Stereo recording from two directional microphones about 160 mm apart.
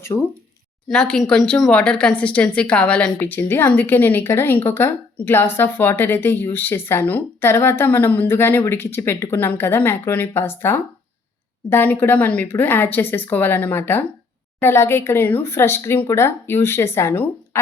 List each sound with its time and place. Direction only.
0.1 s speech: 20° left (ahead or behind)
0.9 s a woman's voice: 5° left (ahead or behind)